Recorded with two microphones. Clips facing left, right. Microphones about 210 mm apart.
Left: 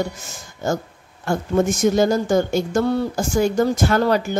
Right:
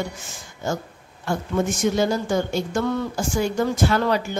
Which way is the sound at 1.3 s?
45° left (ahead or behind).